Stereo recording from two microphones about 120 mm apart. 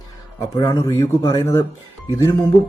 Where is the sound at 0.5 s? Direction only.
30° left (ahead or behind).